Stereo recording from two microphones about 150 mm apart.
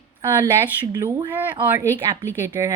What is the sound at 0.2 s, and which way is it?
Speech, 15° right (ahead or behind).